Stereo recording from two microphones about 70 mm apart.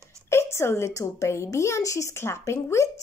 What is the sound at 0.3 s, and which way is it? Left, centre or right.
A woman's voice, left.